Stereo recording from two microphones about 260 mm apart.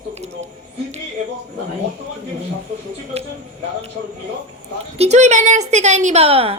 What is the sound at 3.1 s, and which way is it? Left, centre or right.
Speech, right.